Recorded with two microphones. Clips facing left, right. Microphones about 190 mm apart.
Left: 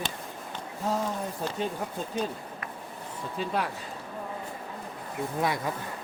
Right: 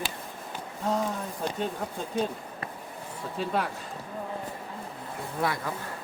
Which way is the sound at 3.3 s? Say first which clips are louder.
Right 1 dB; centre (ahead or behind).